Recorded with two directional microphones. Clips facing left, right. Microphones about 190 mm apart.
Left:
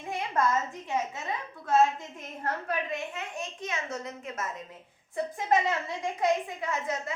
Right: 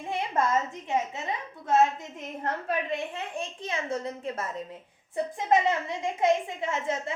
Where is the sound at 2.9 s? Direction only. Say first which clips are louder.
Right 3 dB; 30° right (ahead or behind).